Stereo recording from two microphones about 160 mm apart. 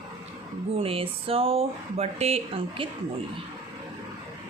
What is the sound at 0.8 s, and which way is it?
A woman's voice, 35° right (ahead or behind).